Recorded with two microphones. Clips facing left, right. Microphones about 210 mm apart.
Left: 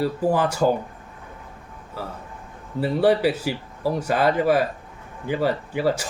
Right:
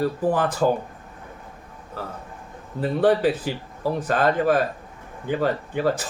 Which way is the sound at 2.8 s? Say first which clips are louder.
Even; 10° left (ahead or behind).